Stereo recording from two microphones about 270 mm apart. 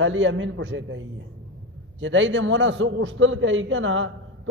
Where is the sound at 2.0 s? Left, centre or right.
Right.